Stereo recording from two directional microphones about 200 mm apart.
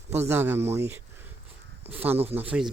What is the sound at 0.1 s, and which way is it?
A man's voice, 10° right (ahead or behind).